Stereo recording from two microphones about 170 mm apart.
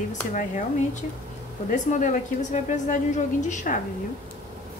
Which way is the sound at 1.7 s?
50° left (ahead or behind).